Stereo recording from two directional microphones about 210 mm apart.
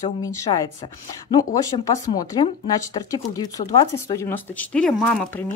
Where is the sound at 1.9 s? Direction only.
15° left (ahead or behind).